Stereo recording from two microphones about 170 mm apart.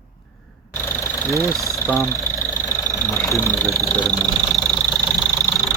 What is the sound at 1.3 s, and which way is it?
Speech, 15° left (ahead or behind).